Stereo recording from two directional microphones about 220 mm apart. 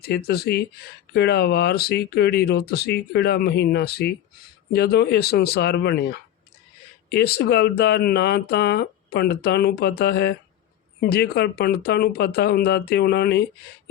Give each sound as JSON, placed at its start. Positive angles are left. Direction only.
{"t": 0.0, "sound": "speech", "side_deg": 45}